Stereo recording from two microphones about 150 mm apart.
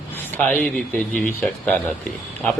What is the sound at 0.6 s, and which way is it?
A man's voice, 10° left (ahead or behind).